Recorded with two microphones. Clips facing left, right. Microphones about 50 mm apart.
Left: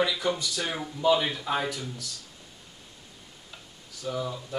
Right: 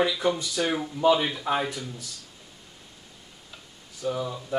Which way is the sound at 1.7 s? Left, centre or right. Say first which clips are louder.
Even; right.